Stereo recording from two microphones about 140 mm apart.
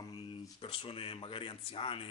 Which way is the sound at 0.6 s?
40° left (ahead or behind).